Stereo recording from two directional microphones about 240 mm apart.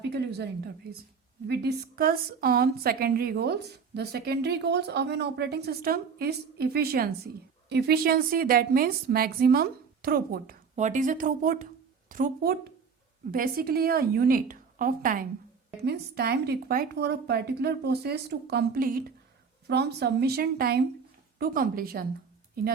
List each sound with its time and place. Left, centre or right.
0.1 s a woman's voice: right